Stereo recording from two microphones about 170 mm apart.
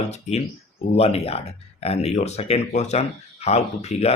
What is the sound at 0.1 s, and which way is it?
Speech, 40° left (ahead or behind).